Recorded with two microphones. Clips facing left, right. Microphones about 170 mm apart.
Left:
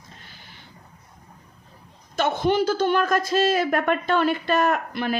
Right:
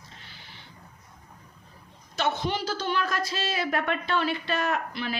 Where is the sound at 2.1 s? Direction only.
50° left (ahead or behind).